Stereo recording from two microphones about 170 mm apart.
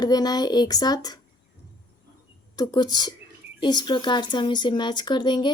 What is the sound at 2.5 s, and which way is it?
Speech, 25° left (ahead or behind).